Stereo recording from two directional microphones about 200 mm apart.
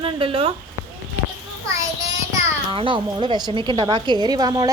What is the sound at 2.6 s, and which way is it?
A woman's voice, 25° right (ahead or behind).